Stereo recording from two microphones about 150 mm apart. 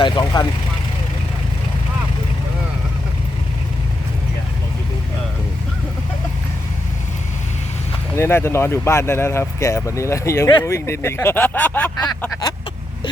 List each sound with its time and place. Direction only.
0.0 s speech: 30° left (ahead or behind)
8.1 s speech: 15° left (ahead or behind)